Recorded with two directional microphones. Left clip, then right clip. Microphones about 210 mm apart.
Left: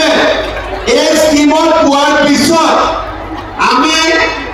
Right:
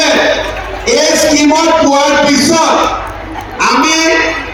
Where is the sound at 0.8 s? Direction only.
35° right (ahead or behind).